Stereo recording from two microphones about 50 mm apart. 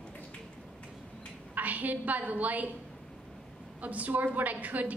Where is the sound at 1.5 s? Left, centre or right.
Right.